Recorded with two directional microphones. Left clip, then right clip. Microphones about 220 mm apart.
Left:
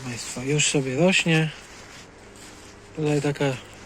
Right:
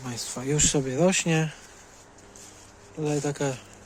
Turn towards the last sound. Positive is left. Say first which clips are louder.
# left 4 dB
turn(degrees=-10)  # may be behind; listen again after turning